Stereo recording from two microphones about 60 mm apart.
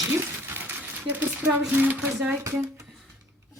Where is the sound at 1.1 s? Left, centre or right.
Right.